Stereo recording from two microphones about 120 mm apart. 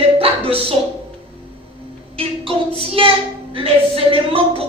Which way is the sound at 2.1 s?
50° right (ahead or behind).